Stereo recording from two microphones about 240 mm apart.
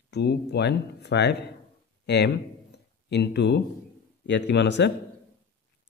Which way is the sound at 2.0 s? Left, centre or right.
Left.